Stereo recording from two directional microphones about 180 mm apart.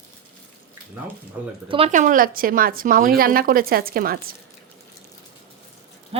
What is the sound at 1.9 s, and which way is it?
Speech, 45° right (ahead or behind).